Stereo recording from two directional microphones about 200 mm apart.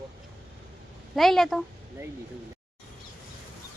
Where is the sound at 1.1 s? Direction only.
Centre (ahead or behind).